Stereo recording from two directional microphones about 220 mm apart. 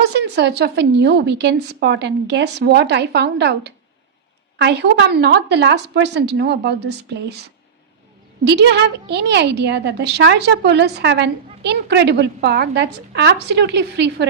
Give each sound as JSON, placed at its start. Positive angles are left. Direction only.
{"t": 0.1, "sound": "a woman's voice", "side_deg": -50}
{"t": 8.4, "sound": "a woman's voice", "side_deg": -50}